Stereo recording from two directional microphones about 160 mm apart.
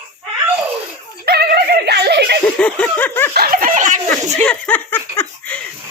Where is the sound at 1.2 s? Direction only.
80° right.